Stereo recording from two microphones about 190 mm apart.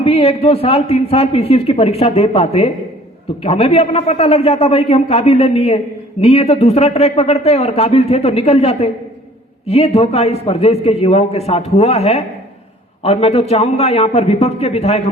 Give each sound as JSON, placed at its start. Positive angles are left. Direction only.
{"t": 0.0, "sound": "a man's voice", "side_deg": 30}